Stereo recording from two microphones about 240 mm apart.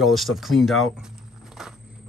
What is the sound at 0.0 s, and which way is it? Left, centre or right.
Speech, centre.